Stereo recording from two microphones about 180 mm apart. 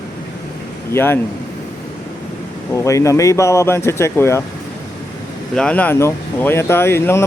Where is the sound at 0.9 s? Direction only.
10° left (ahead or behind).